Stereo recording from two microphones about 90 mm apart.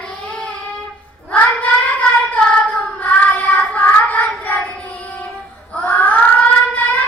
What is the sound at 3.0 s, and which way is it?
Child singing, 20° left (ahead or behind).